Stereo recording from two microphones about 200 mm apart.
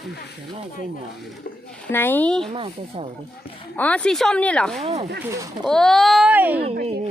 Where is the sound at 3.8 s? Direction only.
5° left (ahead or behind).